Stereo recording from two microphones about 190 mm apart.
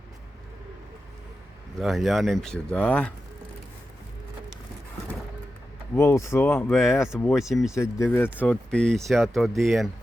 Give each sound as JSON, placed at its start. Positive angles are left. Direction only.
{"t": 1.8, "sound": "speech", "side_deg": 0}
{"t": 6.0, "sound": "speech", "side_deg": 15}
{"t": 7.8, "sound": "speech", "side_deg": 15}